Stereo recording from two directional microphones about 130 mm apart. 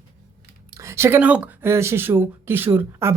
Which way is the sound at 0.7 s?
20° right (ahead or behind).